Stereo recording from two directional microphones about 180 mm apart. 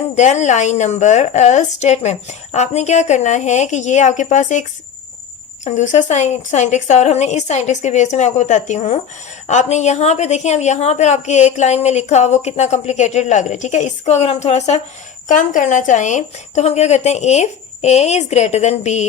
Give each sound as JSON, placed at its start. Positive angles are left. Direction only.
{"t": 0.2, "sound": "a woman's voice", "side_deg": 40}
{"t": 5.6, "sound": "a woman's voice", "side_deg": 40}